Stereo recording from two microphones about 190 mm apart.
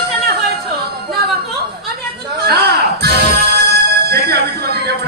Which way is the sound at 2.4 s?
55° right (ahead or behind).